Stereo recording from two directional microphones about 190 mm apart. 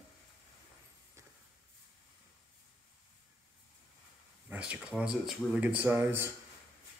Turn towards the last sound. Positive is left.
turn(degrees=-10)  # may be behind; listen again after turning